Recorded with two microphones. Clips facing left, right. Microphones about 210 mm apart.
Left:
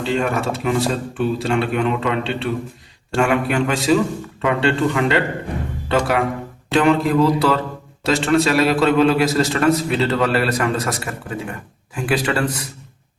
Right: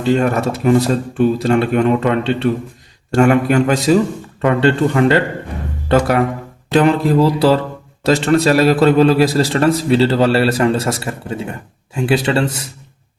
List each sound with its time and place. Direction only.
0.0 s a man's voice: 40° right (ahead or behind); by 12.6 s 25° right (ahead or behind)